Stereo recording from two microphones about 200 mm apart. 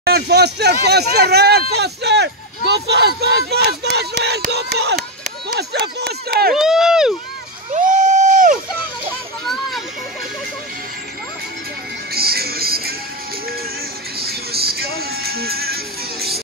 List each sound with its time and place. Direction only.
0.0 s speech: 55° right (ahead or behind)
6.5 s speech: centre (ahead or behind)
7.7 s a sound: 40° right (ahead or behind)
9.4 s a child's voice: centre (ahead or behind)
12.1 s music: 50° right (ahead or behind)
14.1 s music: 50° right (ahead or behind)